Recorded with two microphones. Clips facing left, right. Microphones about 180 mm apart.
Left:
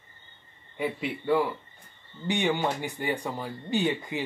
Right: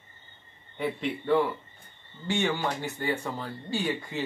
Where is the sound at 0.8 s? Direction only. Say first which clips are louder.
Even; 5° left (ahead or behind).